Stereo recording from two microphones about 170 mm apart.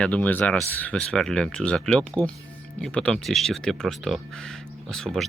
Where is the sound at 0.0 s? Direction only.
10° left (ahead or behind).